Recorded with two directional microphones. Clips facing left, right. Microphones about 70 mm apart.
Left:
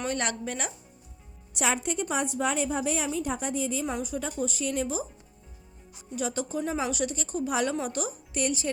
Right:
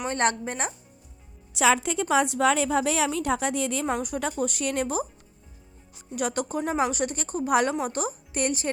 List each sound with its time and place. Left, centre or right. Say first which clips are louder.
0.1 s speech: right 5 dB; right
1.8 s a woman's voice: right 6 dB; right
3.9 s speech: right 3 dB; right
6.1 s speech: right 3 dB; right